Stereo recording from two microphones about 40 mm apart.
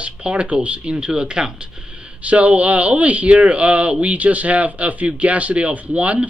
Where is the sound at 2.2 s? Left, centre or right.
Right.